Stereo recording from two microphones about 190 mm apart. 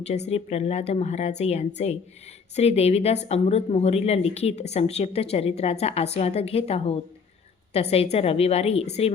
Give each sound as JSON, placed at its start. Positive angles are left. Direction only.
{"t": 0.3, "sound": "a woman's voice", "side_deg": 35}